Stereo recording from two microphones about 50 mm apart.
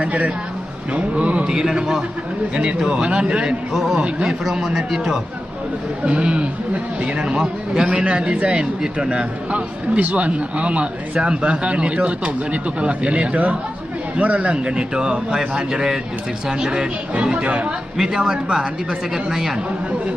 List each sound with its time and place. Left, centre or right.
0.0 s speech: right
1.5 s a man's voice: centre
3.8 s a man's voice: centre
6.1 s a man's voice: right
17.9 s a man's voice: centre